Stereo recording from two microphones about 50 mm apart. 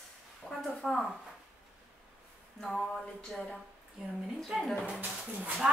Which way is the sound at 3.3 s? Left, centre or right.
Centre.